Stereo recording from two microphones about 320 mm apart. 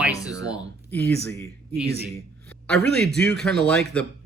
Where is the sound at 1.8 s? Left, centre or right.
Right.